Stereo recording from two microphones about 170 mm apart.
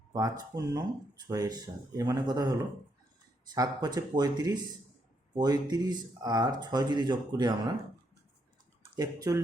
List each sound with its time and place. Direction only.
0.1 s speech: 20° right (ahead or behind)
9.0 s speech: 20° right (ahead or behind)